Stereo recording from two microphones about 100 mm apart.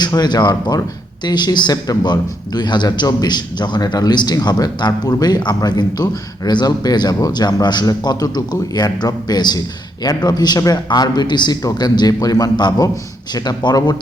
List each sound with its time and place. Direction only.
0.0 s speech: 45° left (ahead or behind)